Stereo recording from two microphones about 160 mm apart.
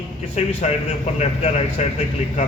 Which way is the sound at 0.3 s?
45° left (ahead or behind).